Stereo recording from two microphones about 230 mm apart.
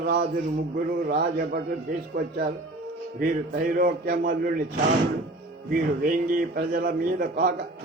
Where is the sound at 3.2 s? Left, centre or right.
Right.